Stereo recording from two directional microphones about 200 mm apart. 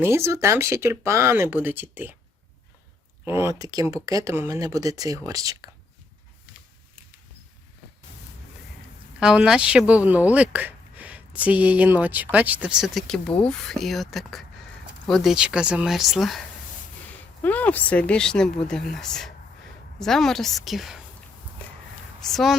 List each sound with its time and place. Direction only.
0.0 s speech: 15° right (ahead or behind)
3.2 s speech: 15° right (ahead or behind)
9.2 s speech: 5° right (ahead or behind)
17.4 s speech: 10° left (ahead or behind)
21.6 s a sound: 5° left (ahead or behind)
22.2 s speech: centre (ahead or behind)